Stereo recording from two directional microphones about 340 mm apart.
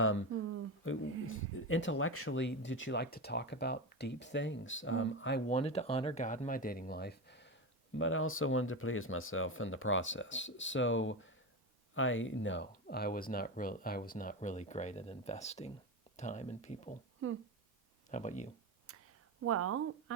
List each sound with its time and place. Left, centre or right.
0.0 s a sound: left
0.8 s speech: left
5.5 s speech: centre
17.2 s speech: right
18.1 s speech: left
18.9 s a sound: right
19.5 s speech: right